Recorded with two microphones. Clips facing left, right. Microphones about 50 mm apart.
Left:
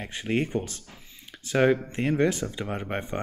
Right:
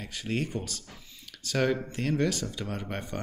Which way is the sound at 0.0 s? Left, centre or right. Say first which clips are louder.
Left 5 dB; left.